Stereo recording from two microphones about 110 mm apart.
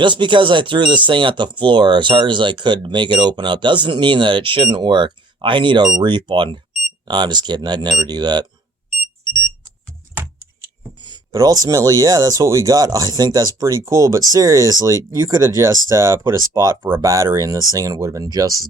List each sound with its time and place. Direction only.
0.0 s speech: 45° right (ahead or behind)
9.0 s alarm: 45° left (ahead or behind)
11.0 s a sound: 40° right (ahead or behind)
11.3 s speech: 35° right (ahead or behind)